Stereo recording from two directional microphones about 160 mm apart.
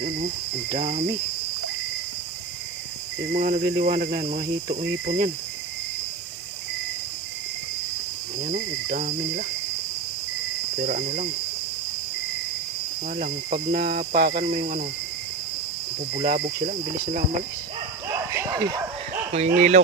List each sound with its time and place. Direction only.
0.8 s cricket: 45° right (ahead or behind)
3.3 s cricket: 50° right (ahead or behind)
3.6 s speech: 65° right (ahead or behind)
8.4 s cricket: 50° right (ahead or behind)
10.8 s cricket: 50° right (ahead or behind)
13.1 s speech: 60° right (ahead or behind)
16.1 s speech: 60° right (ahead or behind)
18.1 s bow-wow: 20° right (ahead or behind)
19.3 s cricket: 45° right (ahead or behind)